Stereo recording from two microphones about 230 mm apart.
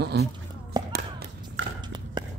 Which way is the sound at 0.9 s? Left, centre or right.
Right.